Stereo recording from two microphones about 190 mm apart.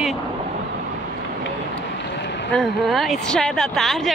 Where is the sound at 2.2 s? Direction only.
65° left (ahead or behind).